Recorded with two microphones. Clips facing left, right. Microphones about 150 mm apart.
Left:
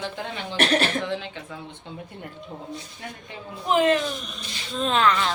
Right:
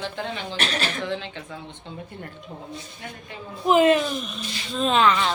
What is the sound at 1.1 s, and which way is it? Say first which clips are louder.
Speech: even; 5° left (ahead or behind).